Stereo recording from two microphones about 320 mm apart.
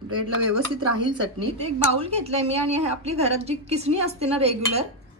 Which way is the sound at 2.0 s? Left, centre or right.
Centre.